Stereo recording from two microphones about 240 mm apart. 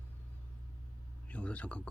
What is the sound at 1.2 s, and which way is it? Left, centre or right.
Speech, centre.